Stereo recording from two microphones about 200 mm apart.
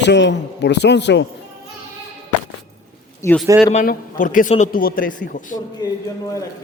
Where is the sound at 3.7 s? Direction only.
45° left (ahead or behind).